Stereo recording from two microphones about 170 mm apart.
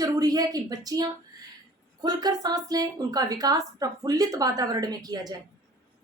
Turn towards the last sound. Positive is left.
turn(degrees=-20)  # may be behind; listen again after turning